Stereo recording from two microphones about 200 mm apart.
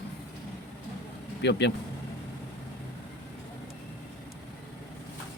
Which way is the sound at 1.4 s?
60° left (ahead or behind).